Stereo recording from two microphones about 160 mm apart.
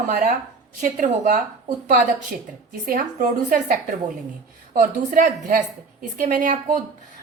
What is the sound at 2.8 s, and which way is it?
A woman's voice, 55° right (ahead or behind).